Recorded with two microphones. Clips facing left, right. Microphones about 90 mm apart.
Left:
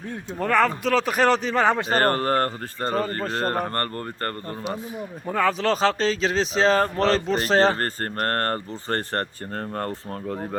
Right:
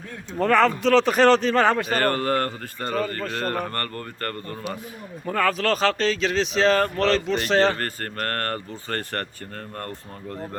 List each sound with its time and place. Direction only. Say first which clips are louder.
0.3 s a man's voice: right 2 dB; 5° left (ahead or behind)
1.8 s speech: left 1 dB; 35° left (ahead or behind)
5.2 s speech: even; 15° left (ahead or behind)